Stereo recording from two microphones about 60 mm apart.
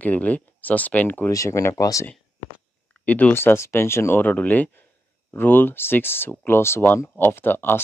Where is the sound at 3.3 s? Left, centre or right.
Left.